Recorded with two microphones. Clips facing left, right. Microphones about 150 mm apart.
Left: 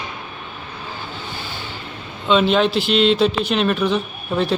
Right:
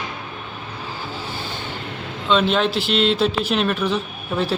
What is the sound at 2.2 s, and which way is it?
Speech, centre (ahead or behind).